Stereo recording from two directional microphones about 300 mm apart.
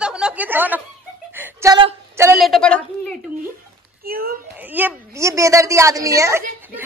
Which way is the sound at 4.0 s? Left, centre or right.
Right.